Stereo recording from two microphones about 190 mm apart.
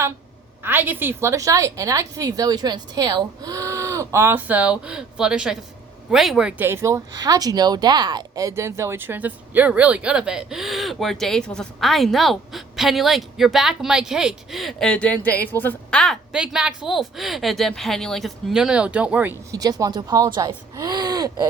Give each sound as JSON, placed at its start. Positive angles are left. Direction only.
{"t": 0.6, "sound": "a woman's voice", "side_deg": -10}